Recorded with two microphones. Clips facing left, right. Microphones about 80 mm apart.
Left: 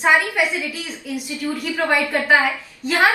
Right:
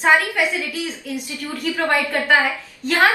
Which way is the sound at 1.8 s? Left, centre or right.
Centre.